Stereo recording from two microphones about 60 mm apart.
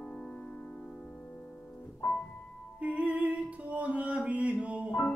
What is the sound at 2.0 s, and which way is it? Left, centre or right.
Music, left.